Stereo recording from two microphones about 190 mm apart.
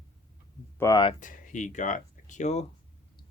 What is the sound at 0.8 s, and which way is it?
Speech, 20° left (ahead or behind).